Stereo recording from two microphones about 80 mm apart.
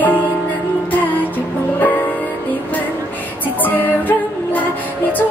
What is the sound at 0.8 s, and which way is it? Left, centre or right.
Music, left.